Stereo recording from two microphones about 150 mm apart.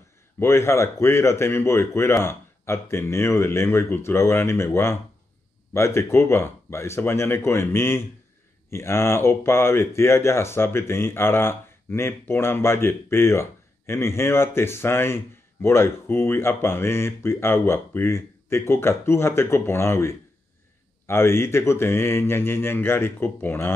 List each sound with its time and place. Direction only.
0.4 s speech: 20° left (ahead or behind)